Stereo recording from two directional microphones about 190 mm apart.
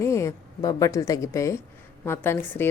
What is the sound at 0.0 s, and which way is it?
A woman's voice, 15° left (ahead or behind).